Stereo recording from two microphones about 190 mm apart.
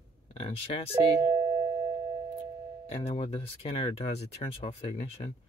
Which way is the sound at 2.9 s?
30° left (ahead or behind).